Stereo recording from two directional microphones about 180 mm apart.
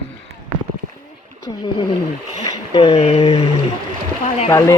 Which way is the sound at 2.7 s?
20° left (ahead or behind).